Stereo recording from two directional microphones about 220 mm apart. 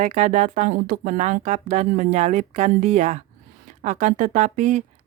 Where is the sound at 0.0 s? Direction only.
30° right (ahead or behind).